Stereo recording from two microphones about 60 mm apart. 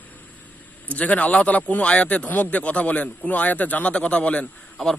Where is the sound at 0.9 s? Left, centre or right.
Left.